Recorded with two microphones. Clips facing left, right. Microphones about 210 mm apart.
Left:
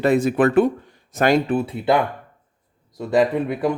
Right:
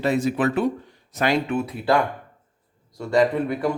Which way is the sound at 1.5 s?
25° left (ahead or behind).